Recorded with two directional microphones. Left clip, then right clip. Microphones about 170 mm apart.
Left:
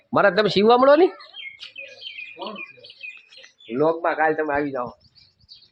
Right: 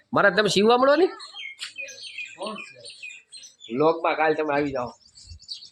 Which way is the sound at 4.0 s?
10° right (ahead or behind).